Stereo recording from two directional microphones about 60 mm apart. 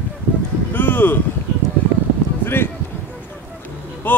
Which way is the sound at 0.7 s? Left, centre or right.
Left.